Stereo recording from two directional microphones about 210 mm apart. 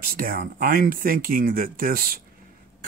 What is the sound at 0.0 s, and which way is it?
Speech, 45° right (ahead or behind).